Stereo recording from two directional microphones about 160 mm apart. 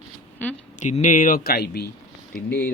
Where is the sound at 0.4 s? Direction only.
10° left (ahead or behind).